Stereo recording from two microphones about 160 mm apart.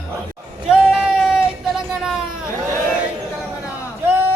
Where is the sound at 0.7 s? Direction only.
5° right (ahead or behind).